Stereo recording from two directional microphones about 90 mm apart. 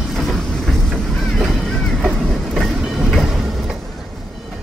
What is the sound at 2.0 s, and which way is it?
Train, centre (ahead or behind).